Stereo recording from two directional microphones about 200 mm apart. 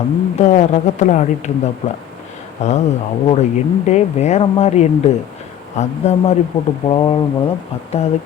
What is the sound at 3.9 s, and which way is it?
Speech, 35° left (ahead or behind).